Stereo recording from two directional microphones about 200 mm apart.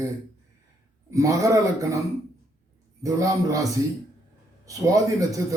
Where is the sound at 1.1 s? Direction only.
15° right (ahead or behind).